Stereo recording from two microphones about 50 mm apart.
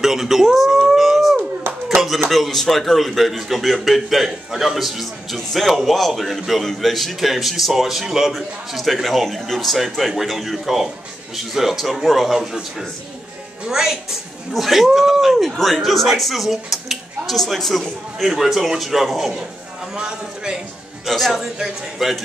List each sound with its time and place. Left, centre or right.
0.0 s livestock: centre
2.3 s a man's voice: centre
13.7 s a woman's voice: centre
20.0 s a man's voice: centre
21.0 s a man's voice: centre